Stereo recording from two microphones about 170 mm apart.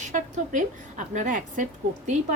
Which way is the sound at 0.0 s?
45° right (ahead or behind).